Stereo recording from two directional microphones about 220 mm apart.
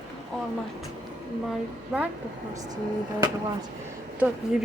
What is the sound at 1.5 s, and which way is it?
A woman's voice, 5° right (ahead or behind).